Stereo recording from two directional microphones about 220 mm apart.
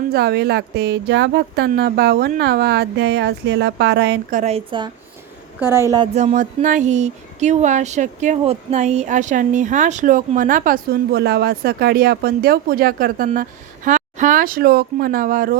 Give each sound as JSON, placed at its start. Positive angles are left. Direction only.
{"t": 0.1, "sound": "speech", "side_deg": -45}
{"t": 5.5, "sound": "a woman's voice", "side_deg": -10}
{"t": 6.1, "sound": "speech", "side_deg": -35}